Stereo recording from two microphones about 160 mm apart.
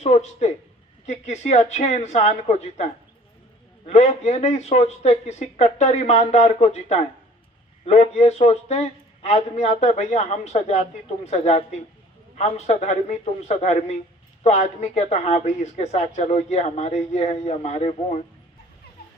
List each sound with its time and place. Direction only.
0.0 s speech: 45° left (ahead or behind)